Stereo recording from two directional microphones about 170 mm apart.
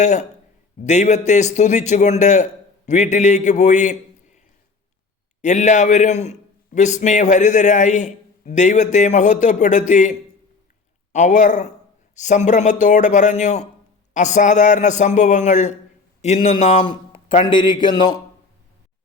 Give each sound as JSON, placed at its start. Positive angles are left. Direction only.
{"t": 0.0, "sound": "a man's voice", "side_deg": 45}
{"t": 5.4, "sound": "a man's voice", "side_deg": 45}